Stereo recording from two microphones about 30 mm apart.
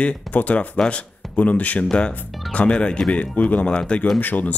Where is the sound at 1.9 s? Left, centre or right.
Left.